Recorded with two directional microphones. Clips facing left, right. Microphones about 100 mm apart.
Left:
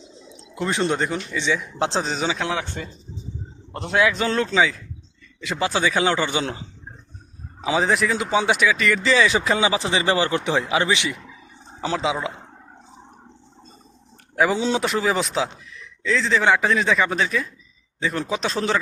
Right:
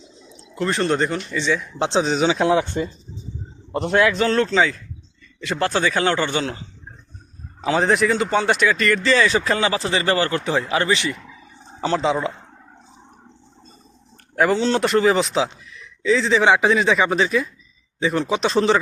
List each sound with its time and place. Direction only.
0.5 s speech: 10° left (ahead or behind)
2.2 s speech: 20° right (ahead or behind)
3.8 s speech: 5° left (ahead or behind)
6.4 s a man's voice: 25° left (ahead or behind)
7.6 s speech: 5° left (ahead or behind)
14.3 s speech: 5° left (ahead or behind)